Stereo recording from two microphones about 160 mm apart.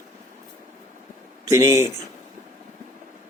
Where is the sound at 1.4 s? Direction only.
20° right (ahead or behind).